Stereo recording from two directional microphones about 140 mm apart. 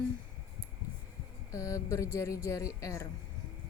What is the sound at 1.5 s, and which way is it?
Speech, 25° left (ahead or behind).